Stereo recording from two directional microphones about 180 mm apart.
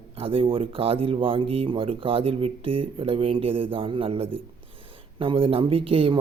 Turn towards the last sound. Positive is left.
turn(degrees=-30)  # may be behind; listen again after turning